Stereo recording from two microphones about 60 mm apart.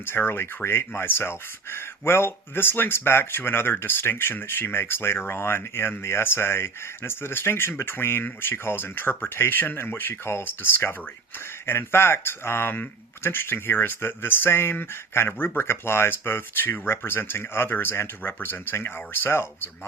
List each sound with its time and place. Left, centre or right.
0.0 s speech: left
18.2 s speech: left